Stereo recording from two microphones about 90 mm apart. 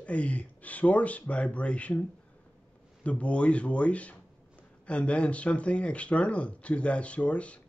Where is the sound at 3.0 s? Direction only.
15° left (ahead or behind).